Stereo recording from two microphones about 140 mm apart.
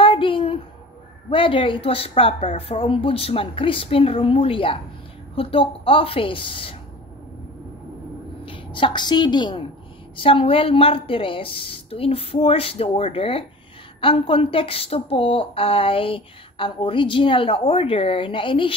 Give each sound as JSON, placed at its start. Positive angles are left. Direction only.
{"t": 0.0, "sound": "a sound", "side_deg": 40}
{"t": 1.3, "sound": "a woman's voice", "side_deg": 40}
{"t": 8.5, "sound": "a woman's voice", "side_deg": 35}